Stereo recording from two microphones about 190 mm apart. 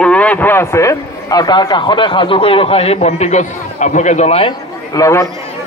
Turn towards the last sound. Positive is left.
turn(degrees=15)  # may be behind; listen again after turning